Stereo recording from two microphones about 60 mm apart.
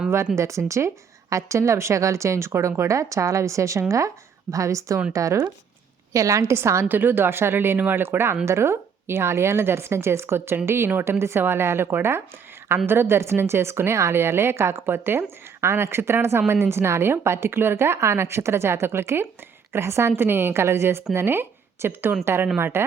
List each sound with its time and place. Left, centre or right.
0.3 s a woman's voice: right
6.5 s a woman's voice: right
6.8 s a woman's voice: right